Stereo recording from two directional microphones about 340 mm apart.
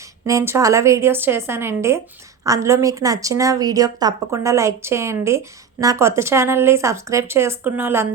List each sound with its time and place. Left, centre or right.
0.3 s a woman's voice: centre